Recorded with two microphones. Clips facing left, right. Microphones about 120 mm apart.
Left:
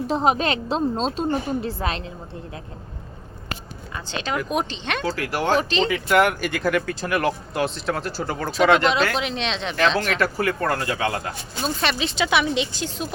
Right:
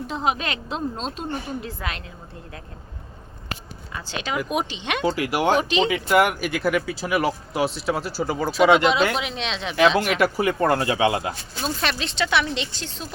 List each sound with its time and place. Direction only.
0.1 s a woman's voice: 35° left (ahead or behind)
3.9 s speech: 5° right (ahead or behind)
11.6 s speech: centre (ahead or behind)